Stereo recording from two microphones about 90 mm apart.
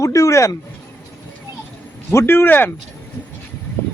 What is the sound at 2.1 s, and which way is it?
Speech, 25° left (ahead or behind).